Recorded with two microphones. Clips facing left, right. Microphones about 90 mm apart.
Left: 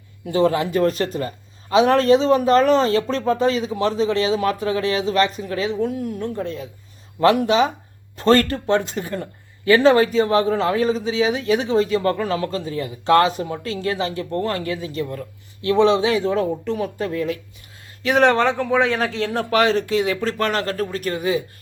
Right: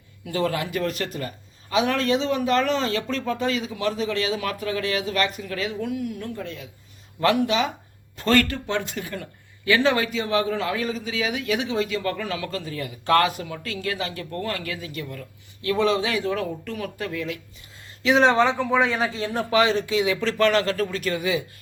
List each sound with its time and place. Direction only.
0.3 s a man's voice: 25° left (ahead or behind)
18.0 s speech: 60° left (ahead or behind)
20.2 s a man's voice: 40° left (ahead or behind)